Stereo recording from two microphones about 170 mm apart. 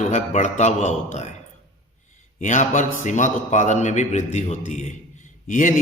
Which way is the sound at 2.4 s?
45° left (ahead or behind).